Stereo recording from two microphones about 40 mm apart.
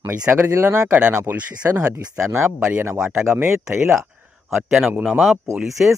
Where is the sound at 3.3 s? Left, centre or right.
Right.